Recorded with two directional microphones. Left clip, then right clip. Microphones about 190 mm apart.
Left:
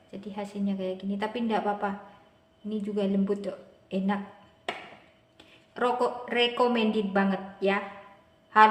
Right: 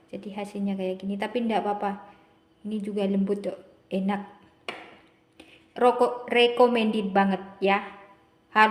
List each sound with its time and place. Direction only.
0.1 s a woman's voice: 25° right (ahead or behind)
5.4 s a woman's voice: 20° right (ahead or behind)